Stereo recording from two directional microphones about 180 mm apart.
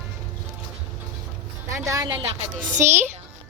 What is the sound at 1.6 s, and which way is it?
Music, 15° right (ahead or behind).